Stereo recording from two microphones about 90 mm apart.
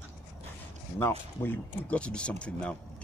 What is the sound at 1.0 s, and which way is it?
Speech, 25° left (ahead or behind).